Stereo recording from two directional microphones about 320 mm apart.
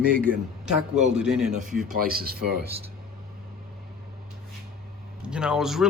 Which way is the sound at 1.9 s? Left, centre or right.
Right.